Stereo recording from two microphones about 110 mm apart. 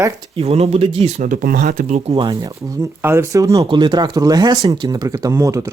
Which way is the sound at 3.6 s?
45° right (ahead or behind).